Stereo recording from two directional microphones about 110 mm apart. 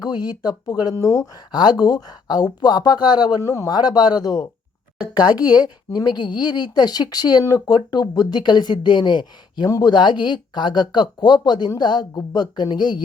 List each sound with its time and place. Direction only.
0.0 s speech: 40° left (ahead or behind)
5.6 s speech: 40° left (ahead or behind)